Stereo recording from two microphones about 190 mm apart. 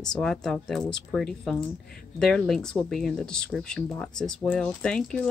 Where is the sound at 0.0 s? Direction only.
5° left (ahead or behind).